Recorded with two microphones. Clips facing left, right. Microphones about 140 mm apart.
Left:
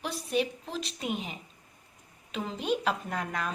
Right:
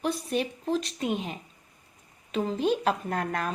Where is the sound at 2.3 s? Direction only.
40° right (ahead or behind).